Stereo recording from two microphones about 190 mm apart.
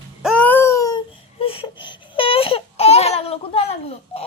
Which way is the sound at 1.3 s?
30° left (ahead or behind).